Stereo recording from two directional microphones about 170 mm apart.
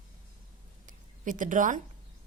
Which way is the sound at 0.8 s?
50° right (ahead or behind).